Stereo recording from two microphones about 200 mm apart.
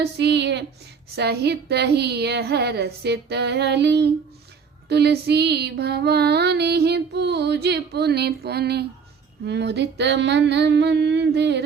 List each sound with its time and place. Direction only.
0.0 s female singing: 55° right (ahead or behind)